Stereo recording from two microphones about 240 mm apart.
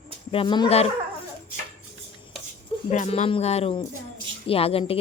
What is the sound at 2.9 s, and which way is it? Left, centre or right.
Speech, left.